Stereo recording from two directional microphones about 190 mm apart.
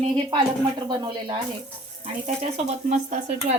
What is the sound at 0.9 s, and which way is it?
Speech, 25° right (ahead or behind).